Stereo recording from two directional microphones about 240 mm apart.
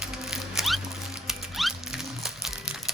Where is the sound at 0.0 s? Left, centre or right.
Centre.